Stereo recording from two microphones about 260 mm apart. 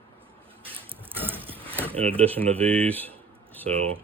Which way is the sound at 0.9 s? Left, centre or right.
Centre.